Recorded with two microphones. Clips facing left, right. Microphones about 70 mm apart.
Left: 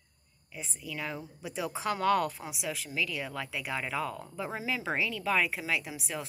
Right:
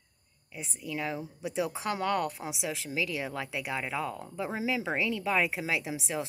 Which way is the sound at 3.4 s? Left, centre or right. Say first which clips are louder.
Right 1 dB; centre.